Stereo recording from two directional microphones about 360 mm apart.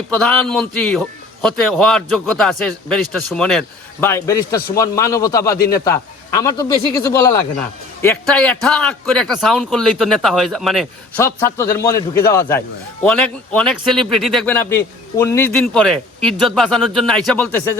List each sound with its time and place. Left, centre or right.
0.2 s a man's voice: centre